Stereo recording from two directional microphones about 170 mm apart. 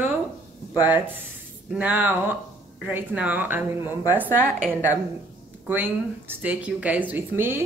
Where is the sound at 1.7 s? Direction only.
10° right (ahead or behind).